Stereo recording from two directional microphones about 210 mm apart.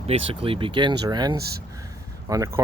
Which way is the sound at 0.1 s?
25° right (ahead or behind).